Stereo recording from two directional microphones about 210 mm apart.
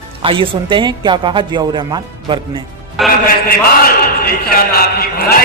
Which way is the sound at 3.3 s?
45° left (ahead or behind).